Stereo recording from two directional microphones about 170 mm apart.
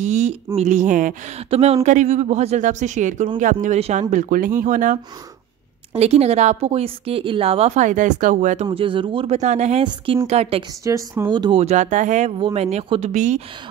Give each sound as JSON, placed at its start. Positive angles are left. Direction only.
{"t": 0.0, "sound": "speech", "side_deg": -40}
{"t": 5.9, "sound": "speech", "side_deg": -40}
{"t": 8.6, "sound": "speech", "side_deg": -30}
{"t": 10.8, "sound": "speech", "side_deg": -15}
{"t": 11.6, "sound": "speech", "side_deg": -45}